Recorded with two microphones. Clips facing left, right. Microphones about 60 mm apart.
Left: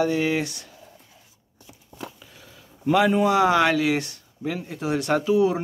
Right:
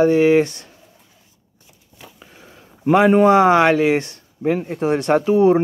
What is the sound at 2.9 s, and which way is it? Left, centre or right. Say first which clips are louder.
Speech: right 7 dB; right.